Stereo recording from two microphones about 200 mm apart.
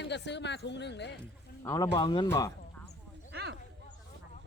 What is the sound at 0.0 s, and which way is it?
Speech, 60° left (ahead or behind).